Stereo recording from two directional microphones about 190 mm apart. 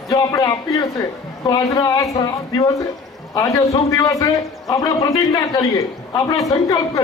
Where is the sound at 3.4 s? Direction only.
15° left (ahead or behind).